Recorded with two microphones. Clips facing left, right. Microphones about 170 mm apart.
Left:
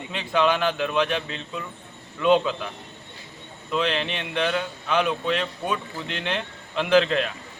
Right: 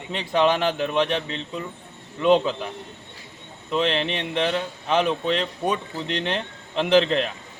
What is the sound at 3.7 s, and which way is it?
Speech, 30° right (ahead or behind).